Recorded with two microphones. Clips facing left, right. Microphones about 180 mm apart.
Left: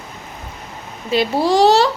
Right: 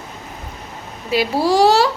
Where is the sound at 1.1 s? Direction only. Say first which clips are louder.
Left 1 dB; 5° right (ahead or behind).